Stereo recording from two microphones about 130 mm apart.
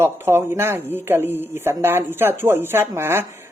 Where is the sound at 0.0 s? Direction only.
20° right (ahead or behind).